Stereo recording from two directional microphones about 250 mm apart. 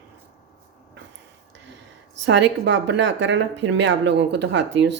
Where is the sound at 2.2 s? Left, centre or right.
Right.